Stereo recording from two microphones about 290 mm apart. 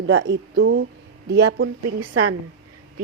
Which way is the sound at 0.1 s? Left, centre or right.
Right.